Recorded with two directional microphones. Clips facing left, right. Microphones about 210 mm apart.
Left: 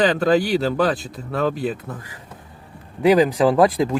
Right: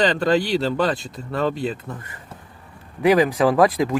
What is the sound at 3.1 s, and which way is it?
Speech, centre (ahead or behind).